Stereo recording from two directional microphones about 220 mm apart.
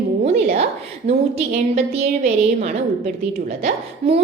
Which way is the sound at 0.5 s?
30° right (ahead or behind).